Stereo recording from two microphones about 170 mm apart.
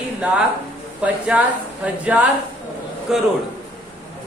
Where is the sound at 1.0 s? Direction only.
10° right (ahead or behind).